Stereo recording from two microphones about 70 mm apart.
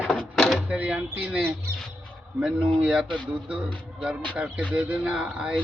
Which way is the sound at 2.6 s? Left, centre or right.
Centre.